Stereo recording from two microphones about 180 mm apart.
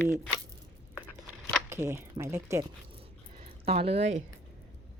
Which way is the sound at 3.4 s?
35° right (ahead or behind).